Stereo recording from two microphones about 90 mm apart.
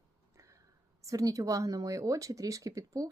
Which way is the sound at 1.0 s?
40° right (ahead or behind).